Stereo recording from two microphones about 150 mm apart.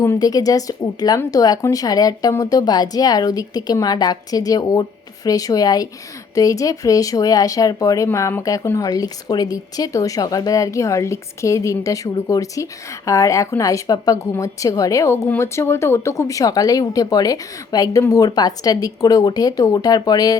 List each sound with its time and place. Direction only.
0.0 s a woman's voice: 20° left (ahead or behind)